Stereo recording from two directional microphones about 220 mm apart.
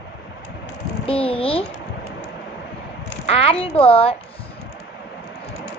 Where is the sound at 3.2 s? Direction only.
25° left (ahead or behind).